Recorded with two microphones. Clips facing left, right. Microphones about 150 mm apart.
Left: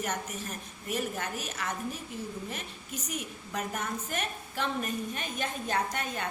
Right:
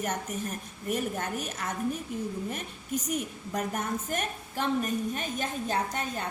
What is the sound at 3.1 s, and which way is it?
A woman's voice, 45° right (ahead or behind).